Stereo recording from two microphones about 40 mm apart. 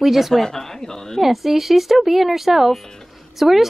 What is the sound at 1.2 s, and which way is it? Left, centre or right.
Speech, centre.